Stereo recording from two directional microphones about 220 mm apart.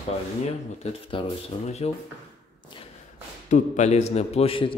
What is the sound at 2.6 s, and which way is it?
Thump, 20° left (ahead or behind).